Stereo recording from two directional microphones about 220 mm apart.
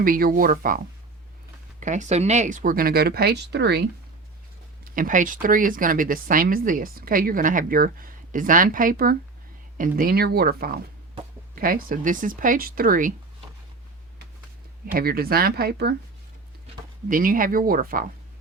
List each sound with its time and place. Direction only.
0.0 s speech: 40° right (ahead or behind)
1.8 s speech: 35° right (ahead or behind); by 3.8 s 50° right (ahead or behind)
4.8 s speech: 35° right (ahead or behind)
14.9 s speech: 45° right (ahead or behind)
17.1 s speech: 40° right (ahead or behind)